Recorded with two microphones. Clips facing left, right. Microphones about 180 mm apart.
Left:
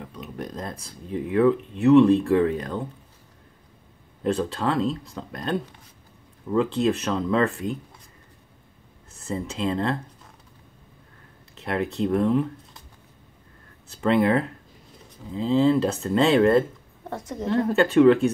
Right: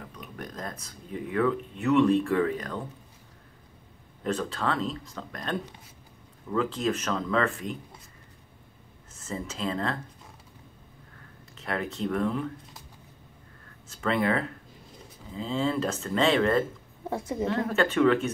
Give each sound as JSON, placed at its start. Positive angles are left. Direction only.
{"t": 0.2, "sound": "speech", "side_deg": 25}
{"t": 4.2, "sound": "speech", "side_deg": 35}
{"t": 9.3, "sound": "speech", "side_deg": 30}
{"t": 11.6, "sound": "speech", "side_deg": 35}
{"t": 14.1, "sound": "speech", "side_deg": 30}
{"t": 17.1, "sound": "a woman's voice", "side_deg": -10}
{"t": 17.6, "sound": "speech", "side_deg": 35}